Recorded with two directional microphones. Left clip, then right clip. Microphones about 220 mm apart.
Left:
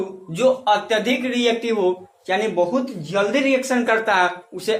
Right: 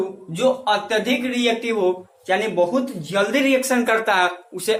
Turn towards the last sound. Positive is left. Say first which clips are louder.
# even
turn(degrees=0)  # may be behind; listen again after turning